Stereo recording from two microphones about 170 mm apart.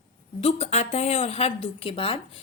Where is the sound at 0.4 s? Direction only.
40° left (ahead or behind).